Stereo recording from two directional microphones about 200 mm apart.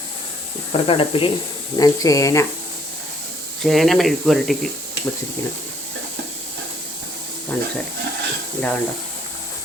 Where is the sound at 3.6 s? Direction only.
Centre (ahead or behind).